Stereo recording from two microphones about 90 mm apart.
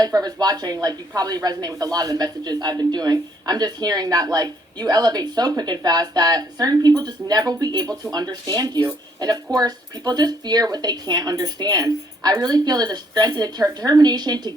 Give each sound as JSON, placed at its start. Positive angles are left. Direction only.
{"t": 0.0, "sound": "speech", "side_deg": -45}